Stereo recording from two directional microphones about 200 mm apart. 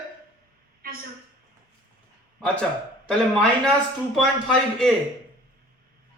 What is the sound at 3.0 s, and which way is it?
A man's voice, 5° left (ahead or behind).